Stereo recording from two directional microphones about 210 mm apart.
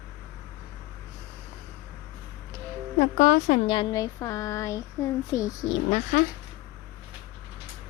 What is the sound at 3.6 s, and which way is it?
Speech, 25° left (ahead or behind).